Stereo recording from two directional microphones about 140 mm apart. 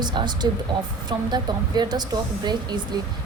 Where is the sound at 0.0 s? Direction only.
35° right (ahead or behind).